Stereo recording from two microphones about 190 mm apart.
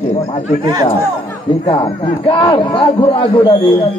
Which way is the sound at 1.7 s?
25° left (ahead or behind).